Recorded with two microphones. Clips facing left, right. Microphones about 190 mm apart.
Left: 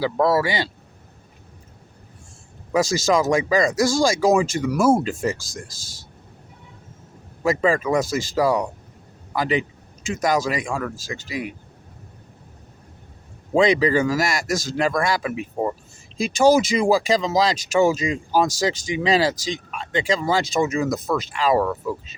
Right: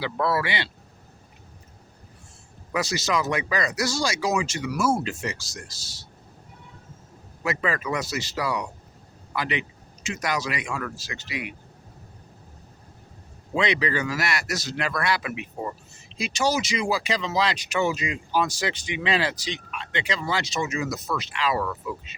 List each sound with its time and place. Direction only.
0.0 s speech: 40° left (ahead or behind)
2.7 s speech: 45° left (ahead or behind)
7.6 s speech: 45° left (ahead or behind)
13.5 s speech: 45° left (ahead or behind)